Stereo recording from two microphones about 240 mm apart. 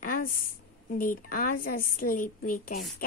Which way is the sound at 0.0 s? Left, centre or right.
Left.